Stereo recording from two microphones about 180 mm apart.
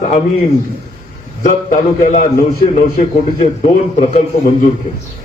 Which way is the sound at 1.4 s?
45° left (ahead or behind).